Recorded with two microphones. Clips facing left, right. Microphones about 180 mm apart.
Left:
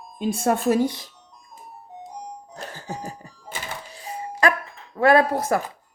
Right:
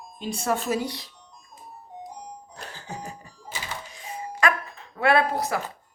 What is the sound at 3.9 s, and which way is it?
Doorbell, 35° left (ahead or behind).